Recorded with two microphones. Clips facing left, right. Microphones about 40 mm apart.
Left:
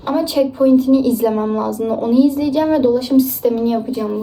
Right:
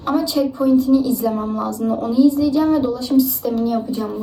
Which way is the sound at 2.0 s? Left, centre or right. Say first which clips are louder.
Left 1 dB; left.